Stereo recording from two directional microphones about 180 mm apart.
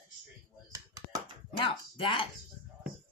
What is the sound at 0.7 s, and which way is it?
Computer keyboard, 15° right (ahead or behind).